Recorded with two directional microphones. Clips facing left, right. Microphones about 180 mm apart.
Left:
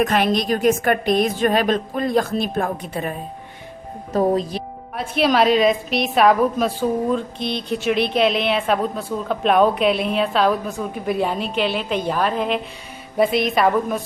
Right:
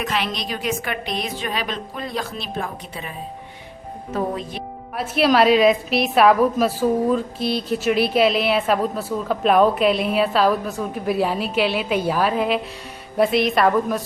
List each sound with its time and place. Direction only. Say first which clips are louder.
0.0 s a woman's voice: left 7 dB; 50° left (ahead or behind)
4.1 s speech: left 6 dB; 35° left (ahead or behind)
4.9 s a woman's voice: right 1 dB; centre (ahead or behind)